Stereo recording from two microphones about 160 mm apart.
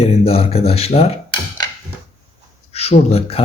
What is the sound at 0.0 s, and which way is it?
Speech, 40° left (ahead or behind).